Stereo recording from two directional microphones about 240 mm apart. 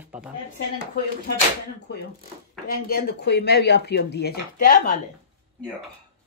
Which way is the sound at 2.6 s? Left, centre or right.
Left.